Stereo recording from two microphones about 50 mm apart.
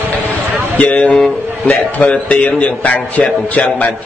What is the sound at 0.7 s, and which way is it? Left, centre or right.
Mantra, left.